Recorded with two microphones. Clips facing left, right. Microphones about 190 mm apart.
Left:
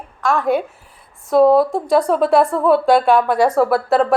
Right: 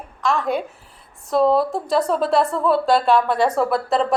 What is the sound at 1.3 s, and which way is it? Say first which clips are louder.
Speech: left 5 dB; 55° left (ahead or behind).